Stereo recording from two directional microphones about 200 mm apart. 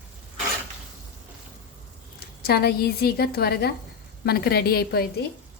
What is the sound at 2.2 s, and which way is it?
A woman's voice, 50° left (ahead or behind).